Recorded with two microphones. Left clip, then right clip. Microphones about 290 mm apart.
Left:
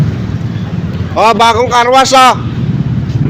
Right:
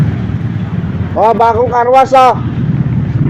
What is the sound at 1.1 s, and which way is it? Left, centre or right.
Speech, left.